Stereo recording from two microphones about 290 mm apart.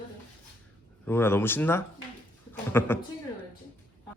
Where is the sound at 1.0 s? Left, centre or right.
Centre.